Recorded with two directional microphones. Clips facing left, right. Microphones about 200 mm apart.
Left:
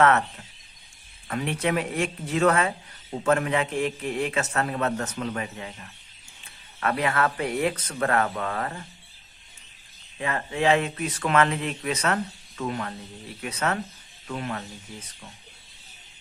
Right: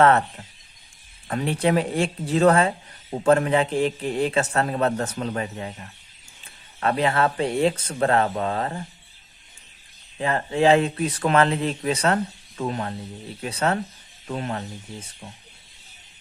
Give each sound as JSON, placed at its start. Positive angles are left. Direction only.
{"t": 1.3, "sound": "speech", "side_deg": -35}
{"t": 6.7, "sound": "speech", "side_deg": -30}
{"t": 10.2, "sound": "speech", "side_deg": -35}